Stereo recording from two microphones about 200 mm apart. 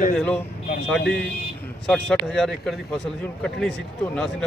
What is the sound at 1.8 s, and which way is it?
A man's voice, centre (ahead or behind).